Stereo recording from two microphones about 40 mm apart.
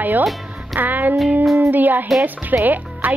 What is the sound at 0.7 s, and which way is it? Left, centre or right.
Music, right.